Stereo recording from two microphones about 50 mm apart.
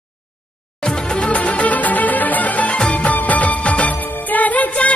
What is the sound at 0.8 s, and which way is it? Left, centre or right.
Music, left.